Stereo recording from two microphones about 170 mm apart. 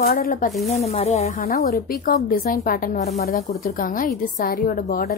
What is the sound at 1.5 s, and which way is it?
Speech, 60° left (ahead or behind).